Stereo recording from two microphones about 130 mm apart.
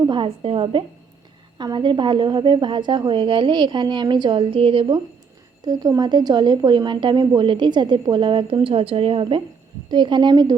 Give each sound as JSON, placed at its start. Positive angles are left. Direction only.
{"t": 0.1, "sound": "a woman's voice", "side_deg": -40}
{"t": 5.6, "sound": "speech", "side_deg": -30}